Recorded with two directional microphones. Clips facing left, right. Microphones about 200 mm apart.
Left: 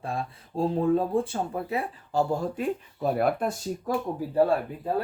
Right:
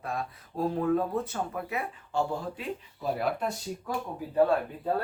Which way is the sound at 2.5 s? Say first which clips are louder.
Left 7 dB; 50° left (ahead or behind).